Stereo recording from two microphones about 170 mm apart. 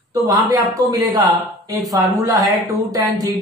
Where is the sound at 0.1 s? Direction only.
20° right (ahead or behind).